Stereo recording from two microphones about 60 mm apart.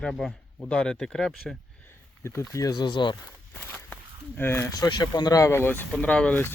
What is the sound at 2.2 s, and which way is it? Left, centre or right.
Speech, left.